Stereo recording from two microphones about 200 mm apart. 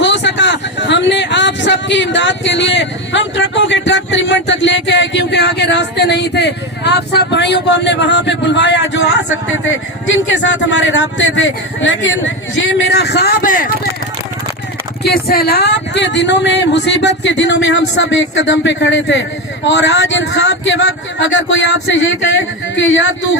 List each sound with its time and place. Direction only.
0.0 s a sound: 65° left (ahead or behind)
10.1 s speech: 65° left (ahead or behind); by 13.7 s 45° left (ahead or behind)
15.0 s speech: 50° left (ahead or behind)
22.7 s speech: 65° left (ahead or behind)